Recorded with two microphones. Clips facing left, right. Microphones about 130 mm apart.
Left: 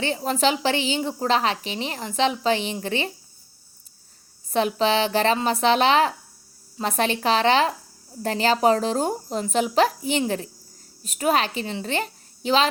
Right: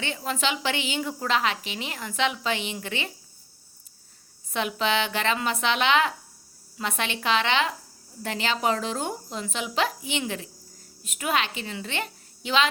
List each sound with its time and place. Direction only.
0.0 s a woman's voice: 35° left (ahead or behind)
4.4 s a woman's voice: 35° left (ahead or behind)